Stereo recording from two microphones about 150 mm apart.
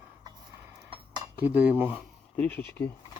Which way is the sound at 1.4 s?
10° right (ahead or behind).